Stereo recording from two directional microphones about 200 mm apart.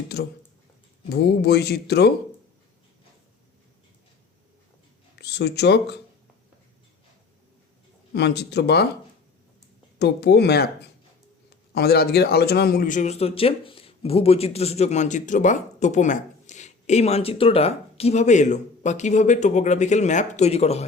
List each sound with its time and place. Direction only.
0.1 s speech: 50° left (ahead or behind)
5.1 s speech: 55° left (ahead or behind)
8.1 s speech: 55° left (ahead or behind)
10.0 s speech: 55° left (ahead or behind)
11.7 s a man's voice: 55° left (ahead or behind); by 20.8 s 30° left (ahead or behind)